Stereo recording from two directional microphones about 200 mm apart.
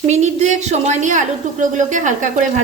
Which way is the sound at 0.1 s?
35° right (ahead or behind).